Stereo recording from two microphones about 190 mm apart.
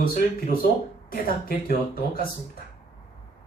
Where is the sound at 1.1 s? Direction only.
50° left (ahead or behind).